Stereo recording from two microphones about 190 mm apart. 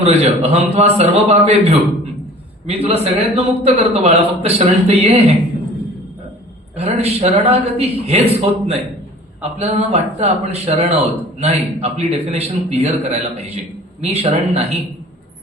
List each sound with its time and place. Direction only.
0.0 s a man's voice: 35° right (ahead or behind)
2.6 s a man's voice: 30° right (ahead or behind)
6.7 s a man's voice: 35° right (ahead or behind)